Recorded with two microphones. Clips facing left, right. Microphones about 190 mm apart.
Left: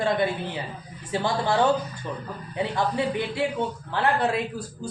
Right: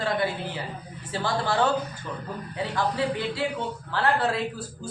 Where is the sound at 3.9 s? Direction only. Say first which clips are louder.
Even; 20° left (ahead or behind).